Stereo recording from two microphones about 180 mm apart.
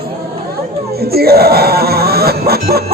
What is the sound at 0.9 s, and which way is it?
Speech, 60° right (ahead or behind).